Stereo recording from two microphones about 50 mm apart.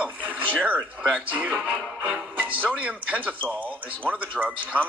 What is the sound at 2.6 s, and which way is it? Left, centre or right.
Speech, right.